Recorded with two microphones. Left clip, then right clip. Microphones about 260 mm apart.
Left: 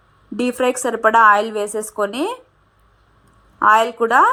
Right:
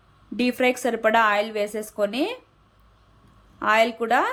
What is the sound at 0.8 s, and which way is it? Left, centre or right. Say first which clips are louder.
A woman's voice: left 10 dB; left.